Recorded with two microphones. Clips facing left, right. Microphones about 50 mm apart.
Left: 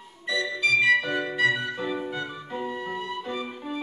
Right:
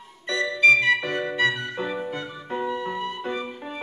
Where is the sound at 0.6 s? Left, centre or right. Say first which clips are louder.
Right 4 dB; right.